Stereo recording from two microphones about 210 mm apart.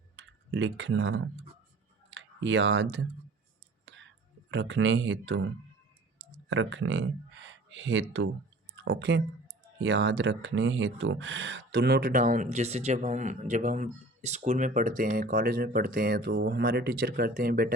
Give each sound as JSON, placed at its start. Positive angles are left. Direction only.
{"t": 0.5, "sound": "speech", "side_deg": -60}
{"t": 3.8, "sound": "whispering", "side_deg": -60}
{"t": 4.5, "sound": "speech", "side_deg": -60}
{"t": 6.5, "sound": "speech", "side_deg": -65}